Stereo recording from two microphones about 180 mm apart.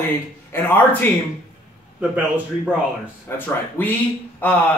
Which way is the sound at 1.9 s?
10° right (ahead or behind).